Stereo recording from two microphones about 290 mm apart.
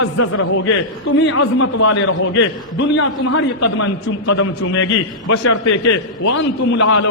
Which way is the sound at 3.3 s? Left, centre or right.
Left.